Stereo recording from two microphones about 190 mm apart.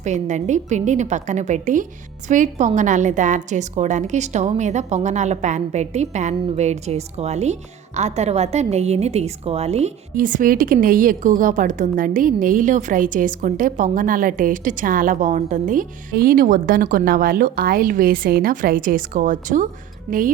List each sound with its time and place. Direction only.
0.0 s a woman's voice: 40° right (ahead or behind)